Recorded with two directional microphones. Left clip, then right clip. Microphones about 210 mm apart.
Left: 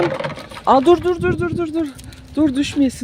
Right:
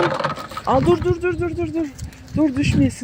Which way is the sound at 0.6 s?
30° left (ahead or behind).